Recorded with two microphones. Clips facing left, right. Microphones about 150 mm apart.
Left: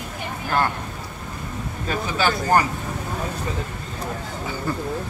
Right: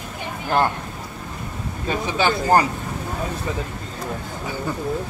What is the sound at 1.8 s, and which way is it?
Speech, 25° right (ahead or behind).